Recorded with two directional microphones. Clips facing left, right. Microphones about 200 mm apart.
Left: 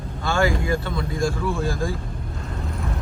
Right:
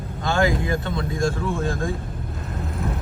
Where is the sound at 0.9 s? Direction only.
Centre (ahead or behind).